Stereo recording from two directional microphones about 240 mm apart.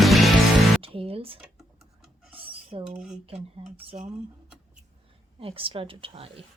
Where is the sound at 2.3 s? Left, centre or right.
Right.